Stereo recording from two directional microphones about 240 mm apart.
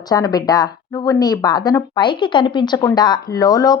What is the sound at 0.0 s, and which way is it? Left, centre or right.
Speech, centre.